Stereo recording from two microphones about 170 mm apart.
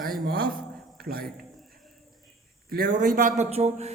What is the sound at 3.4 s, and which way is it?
Speech, 40° right (ahead or behind).